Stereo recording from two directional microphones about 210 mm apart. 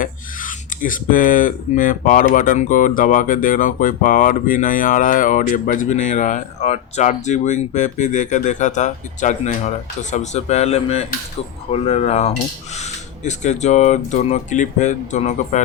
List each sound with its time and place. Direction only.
0.0 s speech: 40° left (ahead or behind)